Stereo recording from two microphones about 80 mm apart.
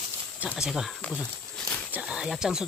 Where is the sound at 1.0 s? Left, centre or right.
Centre.